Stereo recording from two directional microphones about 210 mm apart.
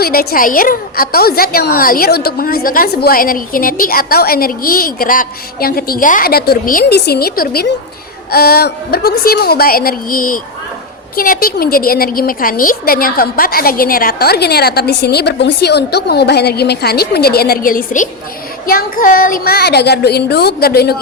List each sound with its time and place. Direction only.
0.0 s a woman's voice: 45° left (ahead or behind)